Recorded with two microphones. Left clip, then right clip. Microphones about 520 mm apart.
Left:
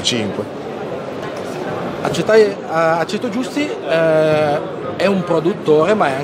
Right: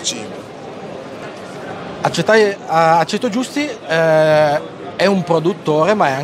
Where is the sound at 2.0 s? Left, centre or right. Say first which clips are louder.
Even; right.